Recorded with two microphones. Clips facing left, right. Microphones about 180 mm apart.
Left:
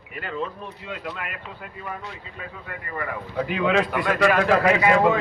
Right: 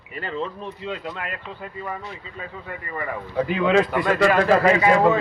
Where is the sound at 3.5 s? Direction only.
5° left (ahead or behind).